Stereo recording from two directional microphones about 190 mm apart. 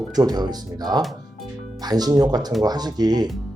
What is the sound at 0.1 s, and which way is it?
Speech, 20° right (ahead or behind).